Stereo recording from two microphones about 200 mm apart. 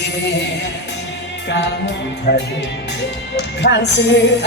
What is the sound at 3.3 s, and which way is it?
Music, 60° left (ahead or behind).